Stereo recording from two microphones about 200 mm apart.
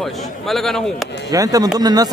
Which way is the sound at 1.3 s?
15° right (ahead or behind).